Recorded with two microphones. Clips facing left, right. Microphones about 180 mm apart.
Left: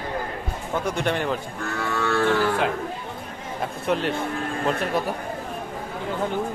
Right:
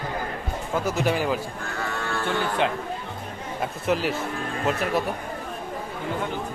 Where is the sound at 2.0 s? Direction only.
75° left (ahead or behind).